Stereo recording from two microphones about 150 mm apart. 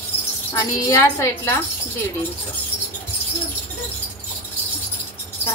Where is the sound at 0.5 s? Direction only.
20° left (ahead or behind).